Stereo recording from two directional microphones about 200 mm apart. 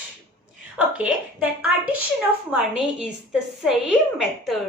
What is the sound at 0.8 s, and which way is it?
A woman's voice, 5° right (ahead or behind).